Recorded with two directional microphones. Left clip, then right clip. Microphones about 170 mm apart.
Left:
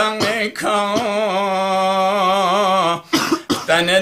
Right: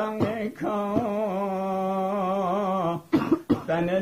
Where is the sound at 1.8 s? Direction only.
10° left (ahead or behind).